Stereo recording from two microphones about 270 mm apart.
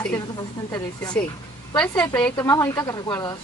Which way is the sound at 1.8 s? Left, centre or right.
Centre.